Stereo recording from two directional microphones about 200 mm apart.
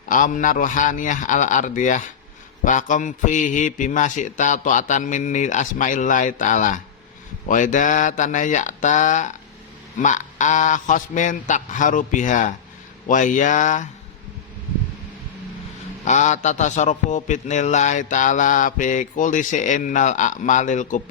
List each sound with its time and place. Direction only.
0.1 s a man's voice: 40° left (ahead or behind)
16.0 s a man's voice: 35° left (ahead or behind)